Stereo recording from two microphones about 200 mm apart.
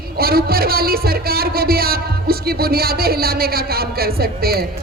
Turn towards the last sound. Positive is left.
turn(degrees=-50)  # may be behind; listen again after turning